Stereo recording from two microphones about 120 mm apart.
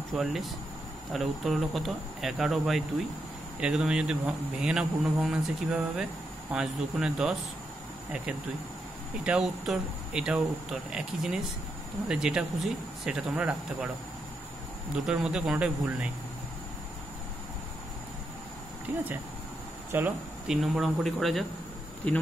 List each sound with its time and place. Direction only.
0.1 s speech: centre (ahead or behind)
9.2 s speech: 5° right (ahead or behind)
15.0 s speech: 5° right (ahead or behind)
18.9 s speech: 15° right (ahead or behind)
20.4 s speech: centre (ahead or behind)